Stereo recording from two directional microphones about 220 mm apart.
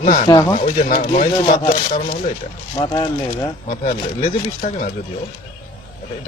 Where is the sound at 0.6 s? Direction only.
35° left (ahead or behind).